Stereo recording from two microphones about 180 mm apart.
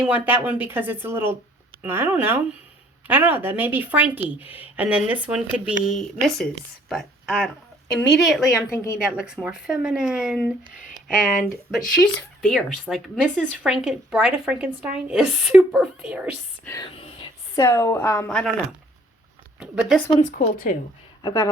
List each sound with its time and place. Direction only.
0.0 s speech: 10° right (ahead or behind)
8.7 s a woman's voice: 15° left (ahead or behind)
9.0 s speech: 5° right (ahead or behind)
16.8 s whispering: 30° left (ahead or behind)
17.5 s a woman's voice: 15° left (ahead or behind)
19.5 s a woman's voice: 5° right (ahead or behind)
20.2 s a woman's voice: 45° left (ahead or behind)
21.2 s speech: 25° left (ahead or behind)